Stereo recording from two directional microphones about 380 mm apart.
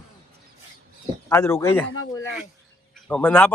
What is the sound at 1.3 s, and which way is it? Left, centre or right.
Speech, centre.